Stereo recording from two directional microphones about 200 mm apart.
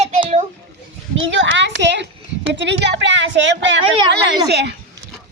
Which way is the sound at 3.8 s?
25° right (ahead or behind).